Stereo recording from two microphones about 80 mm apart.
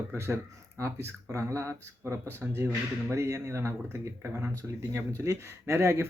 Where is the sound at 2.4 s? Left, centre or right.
Centre.